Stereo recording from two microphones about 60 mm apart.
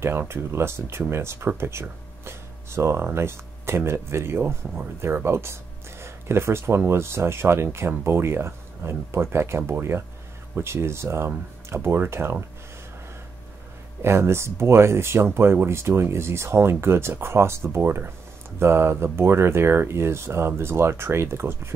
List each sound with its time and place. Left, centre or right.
0.0 s speech: right
1.6 s a sound: right
3.2 s speech: right
14.0 s speech: right